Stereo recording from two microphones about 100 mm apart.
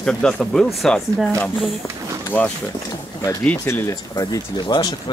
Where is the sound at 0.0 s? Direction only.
5° left (ahead or behind).